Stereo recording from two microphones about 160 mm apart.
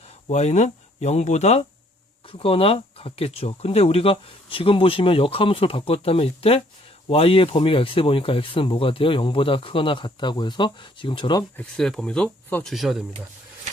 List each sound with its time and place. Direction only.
0.3 s speech: 45° left (ahead or behind); by 11.4 s 30° left (ahead or behind)
11.5 s speech: 5° left (ahead or behind)